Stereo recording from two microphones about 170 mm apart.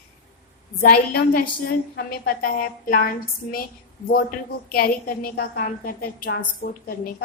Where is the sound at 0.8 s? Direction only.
60° left (ahead or behind).